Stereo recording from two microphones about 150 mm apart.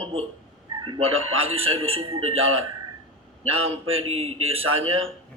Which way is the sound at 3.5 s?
40° right (ahead or behind).